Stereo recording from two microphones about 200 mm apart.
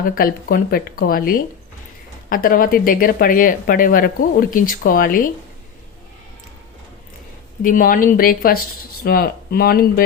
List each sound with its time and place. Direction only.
0.0 s speech: 45° left (ahead or behind)
7.6 s speech: 45° left (ahead or behind)